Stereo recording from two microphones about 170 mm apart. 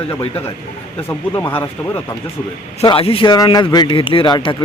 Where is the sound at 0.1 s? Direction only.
15° left (ahead or behind).